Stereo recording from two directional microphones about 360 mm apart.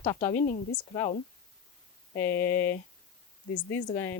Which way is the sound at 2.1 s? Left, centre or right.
Left.